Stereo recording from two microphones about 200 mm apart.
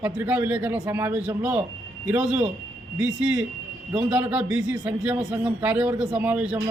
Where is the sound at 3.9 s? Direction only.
5° right (ahead or behind).